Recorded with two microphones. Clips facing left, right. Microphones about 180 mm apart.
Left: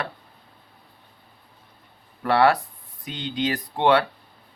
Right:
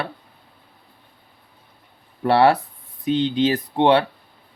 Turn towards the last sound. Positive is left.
turn(degrees=-25)  # may be behind; listen again after turning